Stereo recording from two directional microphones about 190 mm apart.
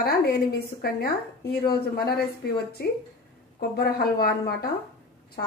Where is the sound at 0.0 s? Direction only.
55° left (ahead or behind).